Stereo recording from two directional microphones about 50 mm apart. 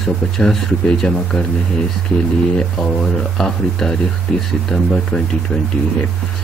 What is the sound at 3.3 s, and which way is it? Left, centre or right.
Speech, centre.